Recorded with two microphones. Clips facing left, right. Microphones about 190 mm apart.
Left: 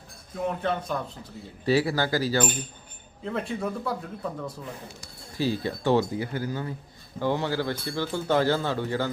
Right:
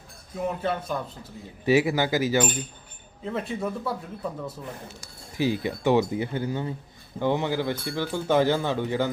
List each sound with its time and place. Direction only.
0.3 s speech: 5° right (ahead or behind)
1.6 s speech: 15° right (ahead or behind)
3.2 s speech: centre (ahead or behind)
4.9 s speech: 15° right (ahead or behind)